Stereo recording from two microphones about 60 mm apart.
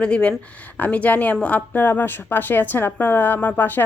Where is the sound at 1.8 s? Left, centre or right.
Left.